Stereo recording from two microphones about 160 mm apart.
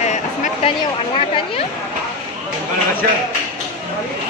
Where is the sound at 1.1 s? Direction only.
35° left (ahead or behind).